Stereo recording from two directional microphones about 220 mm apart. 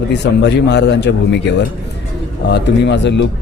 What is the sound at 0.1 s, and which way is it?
A man's voice, 50° left (ahead or behind).